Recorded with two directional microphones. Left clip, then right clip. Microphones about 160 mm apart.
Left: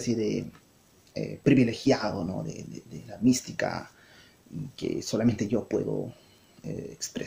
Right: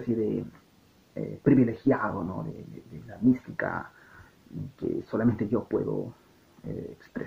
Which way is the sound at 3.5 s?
30° left (ahead or behind).